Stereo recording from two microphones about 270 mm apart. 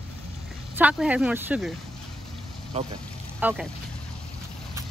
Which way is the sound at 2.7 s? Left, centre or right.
Right.